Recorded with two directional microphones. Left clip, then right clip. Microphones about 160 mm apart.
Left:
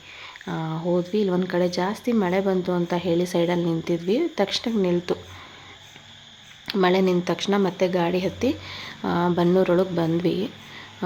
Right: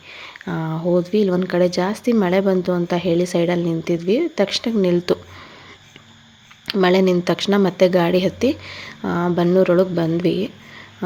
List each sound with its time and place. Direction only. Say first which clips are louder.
0.1 s speech: right 4 dB; 25° right (ahead or behind)
6.7 s speech: right 4 dB; 20° right (ahead or behind)